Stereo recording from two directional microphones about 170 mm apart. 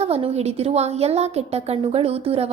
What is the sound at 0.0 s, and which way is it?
A woman's voice, 35° right (ahead or behind).